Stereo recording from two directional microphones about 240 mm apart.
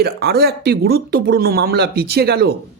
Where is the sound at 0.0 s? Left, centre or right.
Right.